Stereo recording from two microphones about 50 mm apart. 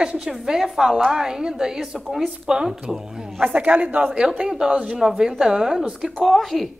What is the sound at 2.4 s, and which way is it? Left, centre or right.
Speech, centre.